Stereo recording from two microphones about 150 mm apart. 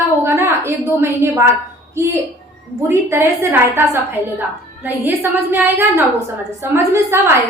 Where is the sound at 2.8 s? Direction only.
20° right (ahead or behind).